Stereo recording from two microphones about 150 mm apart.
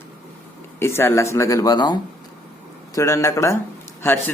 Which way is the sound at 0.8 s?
15° left (ahead or behind).